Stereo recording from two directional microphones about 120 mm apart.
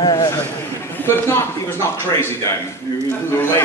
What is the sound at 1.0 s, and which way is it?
Speech, 20° left (ahead or behind).